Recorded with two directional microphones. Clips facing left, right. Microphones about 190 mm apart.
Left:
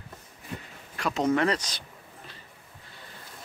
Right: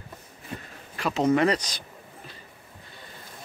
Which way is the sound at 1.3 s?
15° right (ahead or behind).